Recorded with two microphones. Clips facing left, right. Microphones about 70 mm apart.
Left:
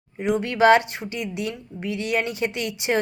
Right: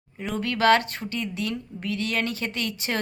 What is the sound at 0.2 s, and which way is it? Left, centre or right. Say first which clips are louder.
A woman's voice: left 5 dB; centre.